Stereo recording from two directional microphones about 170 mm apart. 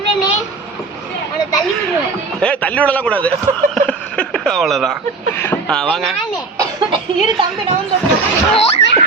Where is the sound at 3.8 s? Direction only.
5° left (ahead or behind).